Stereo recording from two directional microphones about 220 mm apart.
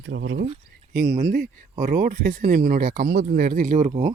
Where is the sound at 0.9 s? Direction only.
40° right (ahead or behind).